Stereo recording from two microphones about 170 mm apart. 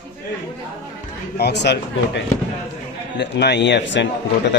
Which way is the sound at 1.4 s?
80° left.